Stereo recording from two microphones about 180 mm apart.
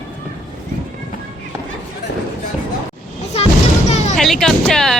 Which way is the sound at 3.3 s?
35° left (ahead or behind).